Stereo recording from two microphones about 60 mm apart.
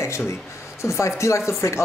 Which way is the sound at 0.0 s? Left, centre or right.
Left.